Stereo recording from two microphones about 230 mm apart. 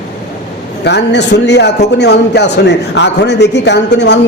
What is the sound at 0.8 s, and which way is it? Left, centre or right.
A man's voice, left.